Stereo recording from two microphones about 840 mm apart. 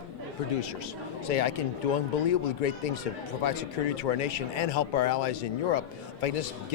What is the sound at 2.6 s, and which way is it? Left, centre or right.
Speech, left.